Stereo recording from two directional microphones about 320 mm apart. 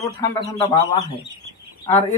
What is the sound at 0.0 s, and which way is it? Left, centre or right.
Speech, centre.